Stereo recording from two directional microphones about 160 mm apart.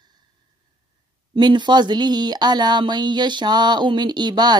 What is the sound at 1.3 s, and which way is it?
A woman's voice, 30° right (ahead or behind).